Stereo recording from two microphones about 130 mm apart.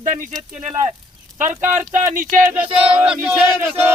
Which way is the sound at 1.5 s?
20° right (ahead or behind).